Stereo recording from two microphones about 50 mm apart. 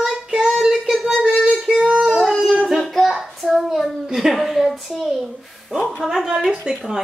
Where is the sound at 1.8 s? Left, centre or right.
Centre.